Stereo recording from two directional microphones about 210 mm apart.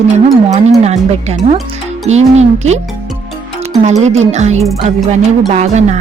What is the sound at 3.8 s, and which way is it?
Speech, 30° right (ahead or behind).